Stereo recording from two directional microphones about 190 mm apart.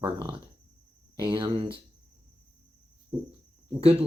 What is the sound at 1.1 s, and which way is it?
Speech, 25° right (ahead or behind).